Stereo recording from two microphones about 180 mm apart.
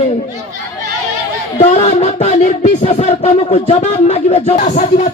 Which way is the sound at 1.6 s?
35° left (ahead or behind).